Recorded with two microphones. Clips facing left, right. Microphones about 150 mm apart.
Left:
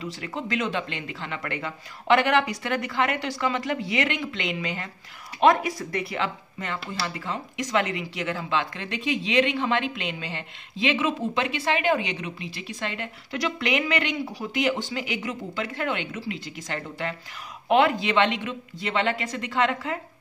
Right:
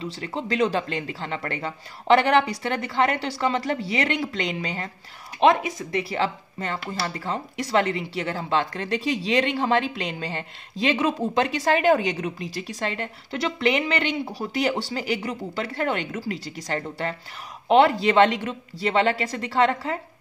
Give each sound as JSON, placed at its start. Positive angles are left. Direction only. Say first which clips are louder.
{"t": 0.0, "sound": "speech", "louder": "right 2 dB", "side_deg": -30}
{"t": 5.4, "sound": "speech", "louder": "right 1 dB", "side_deg": -25}